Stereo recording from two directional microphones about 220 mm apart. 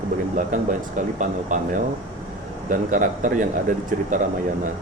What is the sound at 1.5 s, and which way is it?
Speech, 35° right (ahead or behind).